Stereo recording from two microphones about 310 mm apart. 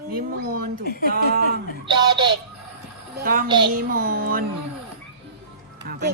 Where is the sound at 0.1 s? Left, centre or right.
Right.